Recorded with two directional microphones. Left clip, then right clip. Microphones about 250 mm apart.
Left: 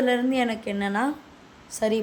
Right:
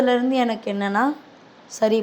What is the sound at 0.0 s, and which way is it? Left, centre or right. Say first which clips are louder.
A woman's voice: right 4 dB; centre.